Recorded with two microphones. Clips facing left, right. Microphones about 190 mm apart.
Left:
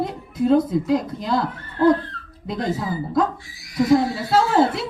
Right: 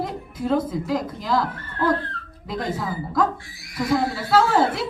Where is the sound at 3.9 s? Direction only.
20° left (ahead or behind).